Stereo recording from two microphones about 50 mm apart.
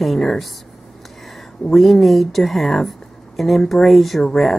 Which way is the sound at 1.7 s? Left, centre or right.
Centre.